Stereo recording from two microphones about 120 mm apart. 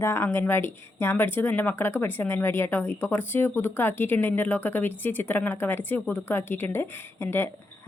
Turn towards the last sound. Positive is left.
turn(degrees=20)  # may be behind; listen again after turning